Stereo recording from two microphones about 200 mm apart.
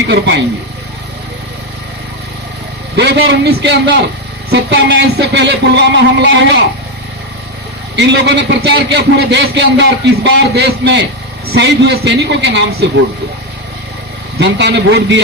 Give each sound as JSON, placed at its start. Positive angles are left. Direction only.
{"t": 2.9, "sound": "a man's voice", "side_deg": -55}
{"t": 7.9, "sound": "a man's voice", "side_deg": -60}
{"t": 14.3, "sound": "a man's voice", "side_deg": -60}